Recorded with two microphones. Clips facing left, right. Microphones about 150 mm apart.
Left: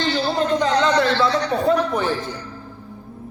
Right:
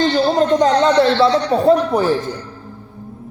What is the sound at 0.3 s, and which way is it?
A man's voice, 35° right (ahead or behind).